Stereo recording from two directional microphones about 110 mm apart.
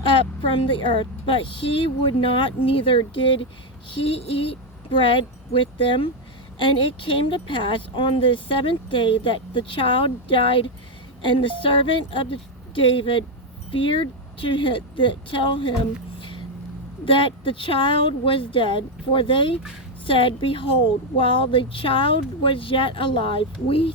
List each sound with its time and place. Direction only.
0.7 s speech: 50° left (ahead or behind)
17.1 s speech: 50° left (ahead or behind)